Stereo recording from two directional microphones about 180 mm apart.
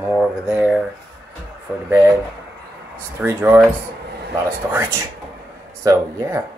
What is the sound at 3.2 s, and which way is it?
Speech, 10° right (ahead or behind).